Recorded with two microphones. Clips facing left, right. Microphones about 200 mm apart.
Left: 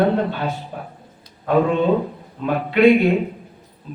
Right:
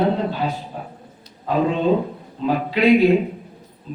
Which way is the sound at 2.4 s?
60° left (ahead or behind).